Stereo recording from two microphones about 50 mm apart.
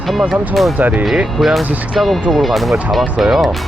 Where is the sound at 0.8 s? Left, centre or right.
Right.